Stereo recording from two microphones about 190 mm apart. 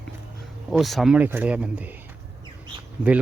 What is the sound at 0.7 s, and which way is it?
Speech, centre (ahead or behind).